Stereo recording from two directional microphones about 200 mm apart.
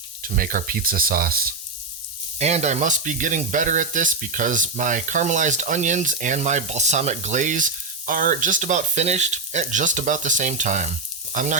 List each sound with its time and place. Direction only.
0.2 s speech: 45° right (ahead or behind)
2.4 s speech: 35° right (ahead or behind)